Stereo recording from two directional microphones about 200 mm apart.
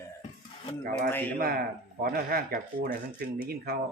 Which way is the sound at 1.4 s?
50° right (ahead or behind).